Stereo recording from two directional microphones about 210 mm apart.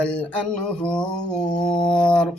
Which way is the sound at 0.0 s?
5° left (ahead or behind).